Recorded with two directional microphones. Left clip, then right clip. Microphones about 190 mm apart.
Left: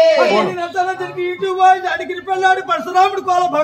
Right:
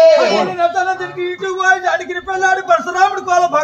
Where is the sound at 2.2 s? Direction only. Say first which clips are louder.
Right 1 dB; 5° right (ahead or behind).